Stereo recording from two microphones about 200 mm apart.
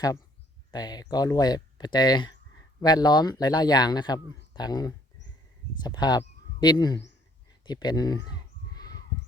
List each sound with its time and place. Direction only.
0.7 s speech: 20° left (ahead or behind)
7.6 s crow: 20° left (ahead or behind)